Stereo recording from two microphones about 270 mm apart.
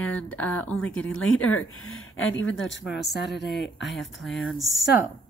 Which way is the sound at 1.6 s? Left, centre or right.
Left.